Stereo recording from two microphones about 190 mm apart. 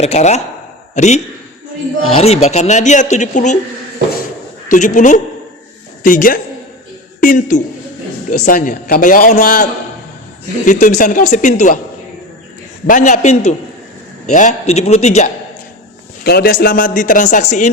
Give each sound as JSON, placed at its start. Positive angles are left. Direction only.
{"t": 0.0, "sound": "speech", "side_deg": 35}
{"t": 4.7, "sound": "a man's voice", "side_deg": 40}
{"t": 10.7, "sound": "speech", "side_deg": 40}
{"t": 12.9, "sound": "speech", "side_deg": 40}
{"t": 16.2, "sound": "a man's voice", "side_deg": 55}